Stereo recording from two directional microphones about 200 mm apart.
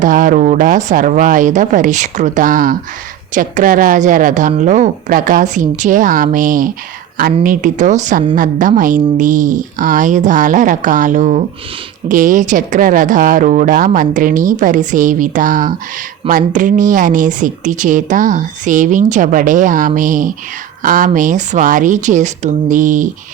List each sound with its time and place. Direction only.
0.0 s a woman's voice: 40° right (ahead or behind)